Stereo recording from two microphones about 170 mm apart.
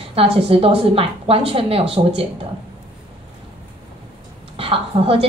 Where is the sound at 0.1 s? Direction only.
35° right (ahead or behind).